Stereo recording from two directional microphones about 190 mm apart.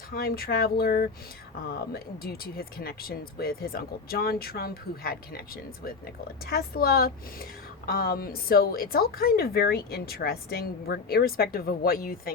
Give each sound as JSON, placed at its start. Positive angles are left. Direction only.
{"t": 0.1, "sound": "a woman's voice", "side_deg": 50}
{"t": 6.4, "sound": "a woman's voice", "side_deg": 55}